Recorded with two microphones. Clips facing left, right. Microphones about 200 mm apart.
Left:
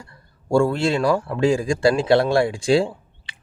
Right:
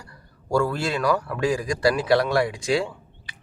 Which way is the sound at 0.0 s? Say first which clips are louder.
Left 2 dB; 25° left (ahead or behind).